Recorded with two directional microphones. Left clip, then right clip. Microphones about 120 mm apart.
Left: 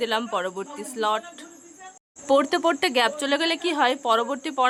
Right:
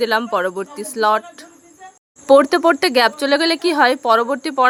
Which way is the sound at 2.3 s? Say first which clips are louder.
Right 9 dB; 35° right (ahead or behind).